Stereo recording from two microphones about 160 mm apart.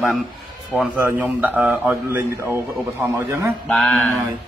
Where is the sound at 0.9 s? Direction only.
10° right (ahead or behind).